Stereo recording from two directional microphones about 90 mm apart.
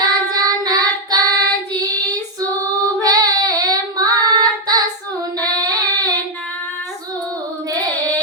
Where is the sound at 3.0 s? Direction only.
45° right (ahead or behind).